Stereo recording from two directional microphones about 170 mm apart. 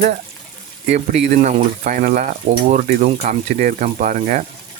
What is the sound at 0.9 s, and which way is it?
Speech, 40° right (ahead or behind).